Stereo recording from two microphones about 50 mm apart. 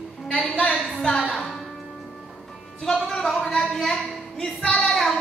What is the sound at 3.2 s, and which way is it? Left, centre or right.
Speech, centre.